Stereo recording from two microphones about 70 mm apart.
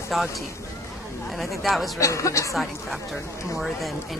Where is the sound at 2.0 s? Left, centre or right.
Left.